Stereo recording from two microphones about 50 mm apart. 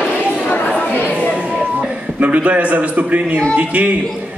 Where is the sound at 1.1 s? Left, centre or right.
Right.